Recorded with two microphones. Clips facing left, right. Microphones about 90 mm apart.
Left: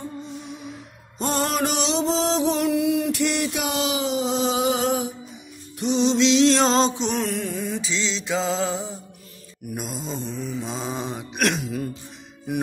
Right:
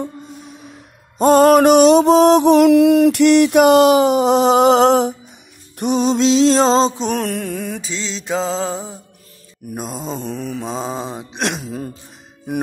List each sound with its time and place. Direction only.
1.1 s music: 45° right (ahead or behind); by 5.1 s 65° right (ahead or behind)
5.8 s music: 50° right (ahead or behind); by 7.1 s 35° right (ahead or behind)
7.1 s mantra: 55° right (ahead or behind); by 11.9 s 35° right (ahead or behind)